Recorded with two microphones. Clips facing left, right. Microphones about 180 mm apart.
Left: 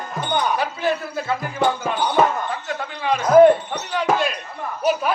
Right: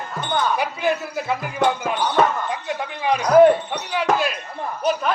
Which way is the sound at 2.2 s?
5° left (ahead or behind).